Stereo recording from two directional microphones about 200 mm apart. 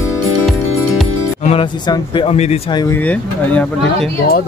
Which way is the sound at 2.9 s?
5° left (ahead or behind).